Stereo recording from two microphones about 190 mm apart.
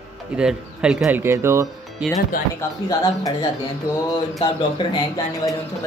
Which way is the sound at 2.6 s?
20° left (ahead or behind).